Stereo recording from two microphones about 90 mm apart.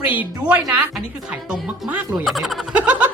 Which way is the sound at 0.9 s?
15° right (ahead or behind).